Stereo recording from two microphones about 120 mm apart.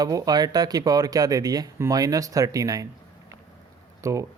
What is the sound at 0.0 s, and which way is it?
Speech, 30° right (ahead or behind).